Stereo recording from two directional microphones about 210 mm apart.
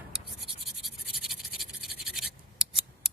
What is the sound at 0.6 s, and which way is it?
Scratch, centre (ahead or behind).